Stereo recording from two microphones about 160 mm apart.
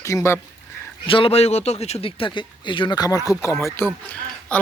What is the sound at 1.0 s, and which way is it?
Speech, 35° left (ahead or behind).